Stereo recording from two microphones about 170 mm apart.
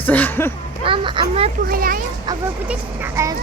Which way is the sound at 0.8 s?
30° right (ahead or behind).